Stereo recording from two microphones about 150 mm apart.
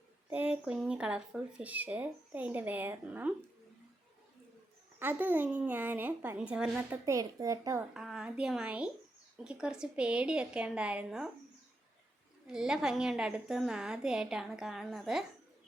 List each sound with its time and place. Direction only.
0.3 s speech: 10° right (ahead or behind)
4.9 s speech: 10° right (ahead or behind)
7.0 s a woman's voice: 20° right (ahead or behind)
7.9 s a woman's voice: 5° right (ahead or behind)
12.5 s a woman's voice: 5° right (ahead or behind)